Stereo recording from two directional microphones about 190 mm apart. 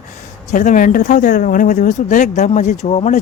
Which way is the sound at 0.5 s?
40° left (ahead or behind).